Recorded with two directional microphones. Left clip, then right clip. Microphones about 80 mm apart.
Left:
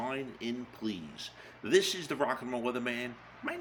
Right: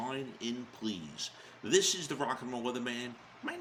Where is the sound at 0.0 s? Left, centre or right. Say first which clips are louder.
Left 2 dB; right.